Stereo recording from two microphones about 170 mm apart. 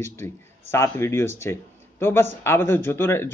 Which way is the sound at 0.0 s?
15° left (ahead or behind).